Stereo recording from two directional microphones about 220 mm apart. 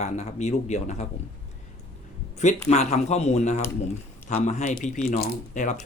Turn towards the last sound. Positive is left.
turn(degrees=35)  # may be behind; listen again after turning